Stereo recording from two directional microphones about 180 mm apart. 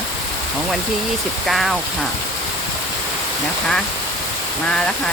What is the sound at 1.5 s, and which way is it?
Speech, centre (ahead or behind).